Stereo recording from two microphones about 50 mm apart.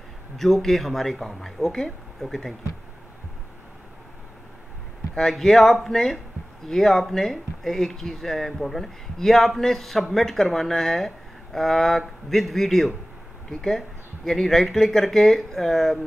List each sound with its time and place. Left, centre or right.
0.4 s speech: centre
5.3 s speech: centre